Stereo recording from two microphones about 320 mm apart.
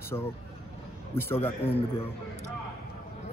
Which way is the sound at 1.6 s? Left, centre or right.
Centre.